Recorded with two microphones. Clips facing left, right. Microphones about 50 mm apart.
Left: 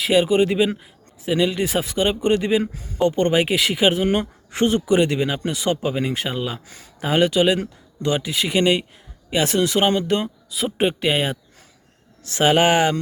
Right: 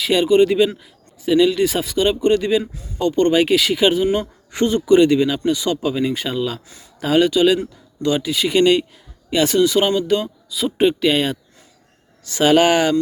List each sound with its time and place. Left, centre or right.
0.0 s speech: centre
2.7 s speech: left
3.2 s speech: centre
9.6 s speech: left
12.4 s speech: centre